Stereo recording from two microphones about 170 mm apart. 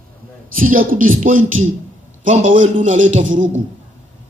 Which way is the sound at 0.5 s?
55° right (ahead or behind).